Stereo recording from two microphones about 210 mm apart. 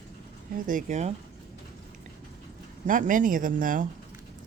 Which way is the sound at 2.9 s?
40° right (ahead or behind).